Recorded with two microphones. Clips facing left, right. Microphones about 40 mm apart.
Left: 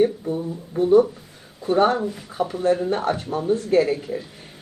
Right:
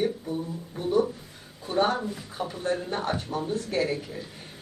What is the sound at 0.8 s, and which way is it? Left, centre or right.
Speech, left.